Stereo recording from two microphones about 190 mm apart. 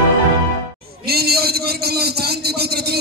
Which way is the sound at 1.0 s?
55° right (ahead or behind).